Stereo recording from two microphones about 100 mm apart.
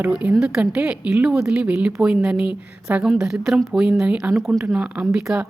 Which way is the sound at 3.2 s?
5° right (ahead or behind).